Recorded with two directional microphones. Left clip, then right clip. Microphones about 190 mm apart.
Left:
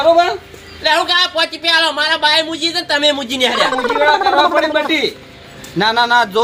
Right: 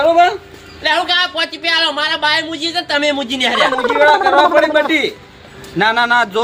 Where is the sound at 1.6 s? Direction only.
15° right (ahead or behind).